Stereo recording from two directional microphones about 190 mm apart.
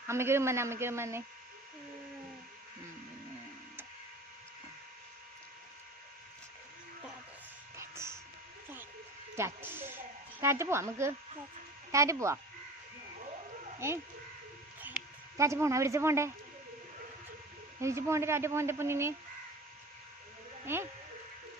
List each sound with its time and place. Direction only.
0.1 s speech: 15° right (ahead or behind)
7.8 s music: 15° right (ahead or behind)
9.3 s speech: 10° right (ahead or behind)
13.7 s speech: 15° right (ahead or behind)
14.8 s a sound: 10° right (ahead or behind)
17.7 s speech: 15° right (ahead or behind)
20.7 s speech: 10° right (ahead or behind)